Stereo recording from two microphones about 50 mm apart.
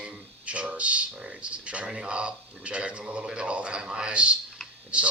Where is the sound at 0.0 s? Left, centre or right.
Right.